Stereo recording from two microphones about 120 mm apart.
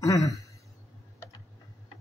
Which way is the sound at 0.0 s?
30° left (ahead or behind).